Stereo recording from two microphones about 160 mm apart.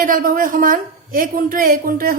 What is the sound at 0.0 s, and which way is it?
A woman's voice, 60° right (ahead or behind).